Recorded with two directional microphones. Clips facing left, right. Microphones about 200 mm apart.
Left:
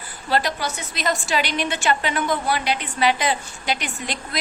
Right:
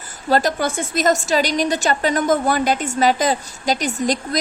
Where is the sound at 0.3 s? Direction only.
45° right (ahead or behind).